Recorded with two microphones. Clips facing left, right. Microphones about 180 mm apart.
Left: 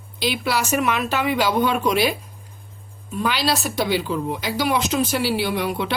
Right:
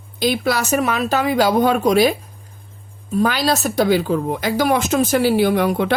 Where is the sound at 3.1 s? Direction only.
45° right (ahead or behind).